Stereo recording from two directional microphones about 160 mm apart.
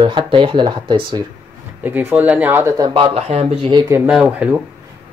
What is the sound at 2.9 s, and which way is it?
Speech, 35° right (ahead or behind).